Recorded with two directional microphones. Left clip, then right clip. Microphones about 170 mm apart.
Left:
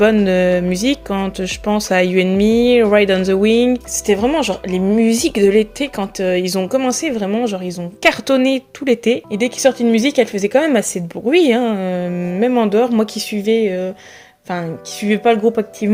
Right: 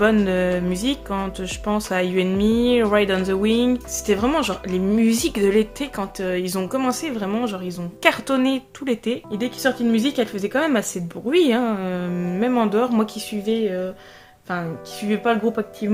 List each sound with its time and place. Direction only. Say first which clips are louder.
0.0 s speech: left 6 dB; 30° left (ahead or behind)
15.0 s speech: left 7 dB; 35° left (ahead or behind)